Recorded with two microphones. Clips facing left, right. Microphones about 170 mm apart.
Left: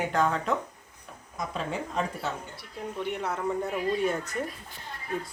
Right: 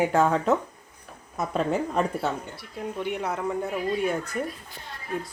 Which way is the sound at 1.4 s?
50° right (ahead or behind).